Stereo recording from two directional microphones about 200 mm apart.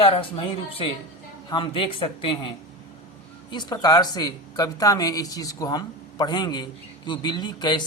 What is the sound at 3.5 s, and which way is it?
A woman's voice, 20° left (ahead or behind).